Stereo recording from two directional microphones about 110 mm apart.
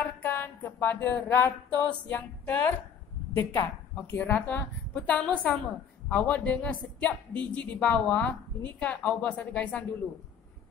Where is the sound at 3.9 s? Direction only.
15° left (ahead or behind).